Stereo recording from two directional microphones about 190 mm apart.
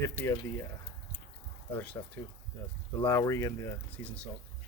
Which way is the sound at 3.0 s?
15° left (ahead or behind).